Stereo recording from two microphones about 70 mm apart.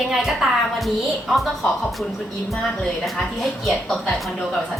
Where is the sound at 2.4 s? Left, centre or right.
Centre.